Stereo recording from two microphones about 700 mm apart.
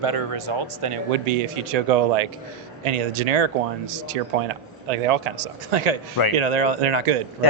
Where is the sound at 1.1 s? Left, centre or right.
Right.